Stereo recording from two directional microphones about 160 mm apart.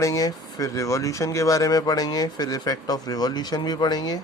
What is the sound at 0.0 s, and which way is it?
Speech, 20° left (ahead or behind).